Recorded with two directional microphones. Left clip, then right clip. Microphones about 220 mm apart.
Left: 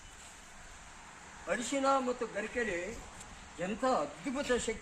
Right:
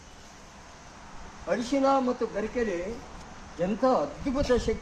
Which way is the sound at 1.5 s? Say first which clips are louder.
Right 6 dB; centre (ahead or behind).